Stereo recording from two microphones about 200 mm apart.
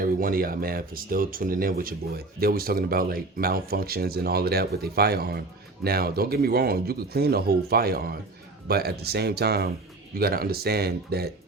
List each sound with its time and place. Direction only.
0.0 s speech: 45° right (ahead or behind)